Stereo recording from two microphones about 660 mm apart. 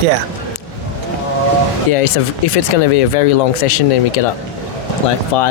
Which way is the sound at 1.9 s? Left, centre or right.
Left.